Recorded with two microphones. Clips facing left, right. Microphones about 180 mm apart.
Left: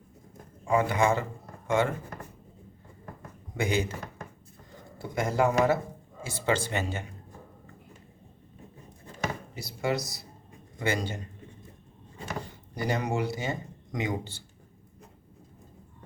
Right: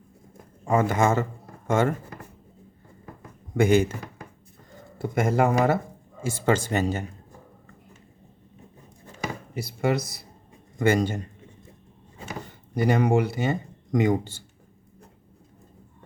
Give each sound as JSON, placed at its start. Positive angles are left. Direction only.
{"t": 0.6, "sound": "speech", "side_deg": -45}
{"t": 3.6, "sound": "speech", "side_deg": -50}
{"t": 4.9, "sound": "speech", "side_deg": -55}
{"t": 9.6, "sound": "a man's voice", "side_deg": -55}
{"t": 12.7, "sound": "speech", "side_deg": -55}